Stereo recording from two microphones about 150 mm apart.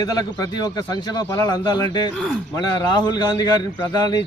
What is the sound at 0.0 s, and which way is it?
A man's voice, 25° left (ahead or behind).